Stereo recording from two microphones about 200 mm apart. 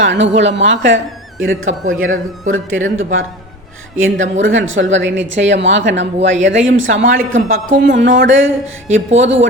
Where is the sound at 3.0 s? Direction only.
80° right.